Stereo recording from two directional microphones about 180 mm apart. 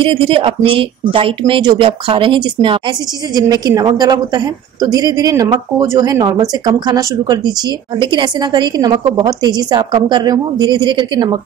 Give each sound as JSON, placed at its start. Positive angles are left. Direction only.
{"t": 0.0, "sound": "a woman's voice", "side_deg": -30}